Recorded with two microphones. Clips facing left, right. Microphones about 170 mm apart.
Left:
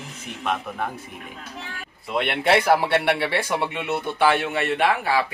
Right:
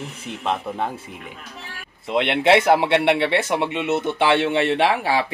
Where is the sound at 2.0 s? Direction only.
25° right (ahead or behind).